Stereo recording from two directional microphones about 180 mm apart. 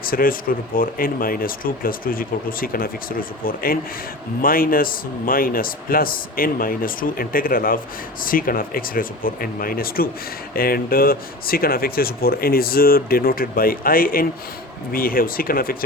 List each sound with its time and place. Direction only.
0.0 s speech: 55° left (ahead or behind)